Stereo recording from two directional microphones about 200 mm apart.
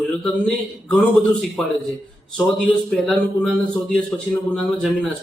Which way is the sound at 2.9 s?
5° left (ahead or behind).